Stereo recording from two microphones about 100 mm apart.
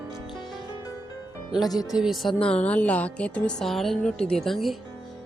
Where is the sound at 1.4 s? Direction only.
40° left (ahead or behind).